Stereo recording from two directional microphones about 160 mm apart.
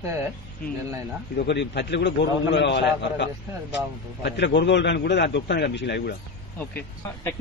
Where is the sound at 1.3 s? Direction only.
90° left.